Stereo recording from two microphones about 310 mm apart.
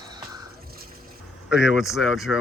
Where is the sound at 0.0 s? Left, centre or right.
Centre.